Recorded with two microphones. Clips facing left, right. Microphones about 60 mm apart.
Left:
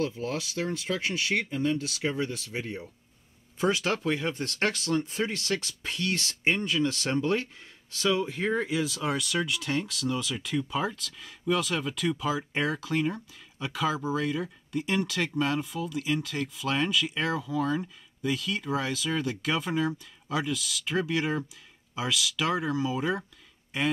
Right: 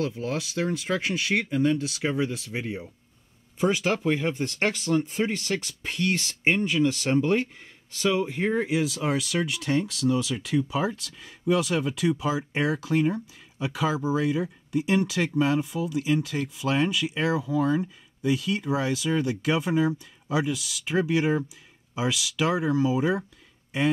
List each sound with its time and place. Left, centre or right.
0.0 s speech: centre